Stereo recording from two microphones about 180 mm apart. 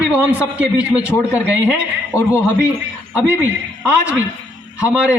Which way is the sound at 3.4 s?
10° right (ahead or behind).